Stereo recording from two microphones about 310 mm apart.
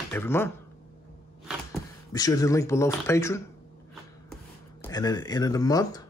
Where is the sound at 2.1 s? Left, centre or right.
Centre.